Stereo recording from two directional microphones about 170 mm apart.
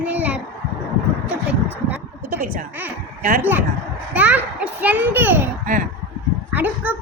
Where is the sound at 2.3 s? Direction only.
55° right (ahead or behind).